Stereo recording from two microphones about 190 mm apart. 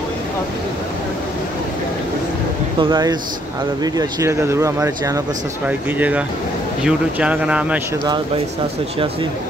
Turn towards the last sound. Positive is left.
turn(degrees=-5)  # may be behind; listen again after turning